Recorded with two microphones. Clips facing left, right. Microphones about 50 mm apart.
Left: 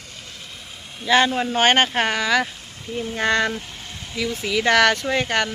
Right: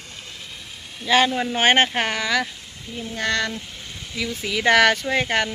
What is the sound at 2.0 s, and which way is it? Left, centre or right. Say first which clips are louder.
Speech: left 3 dB; centre.